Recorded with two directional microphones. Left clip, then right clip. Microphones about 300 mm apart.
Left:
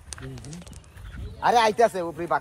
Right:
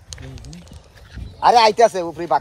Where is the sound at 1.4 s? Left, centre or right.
Right.